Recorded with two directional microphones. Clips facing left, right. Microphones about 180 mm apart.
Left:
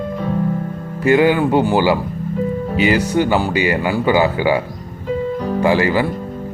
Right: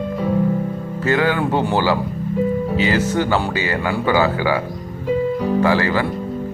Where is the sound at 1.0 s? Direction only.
15° left (ahead or behind).